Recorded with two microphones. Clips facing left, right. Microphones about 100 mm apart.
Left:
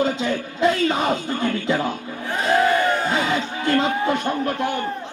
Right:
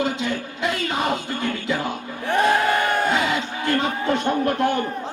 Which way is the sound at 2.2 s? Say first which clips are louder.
Even; 60° right (ahead or behind).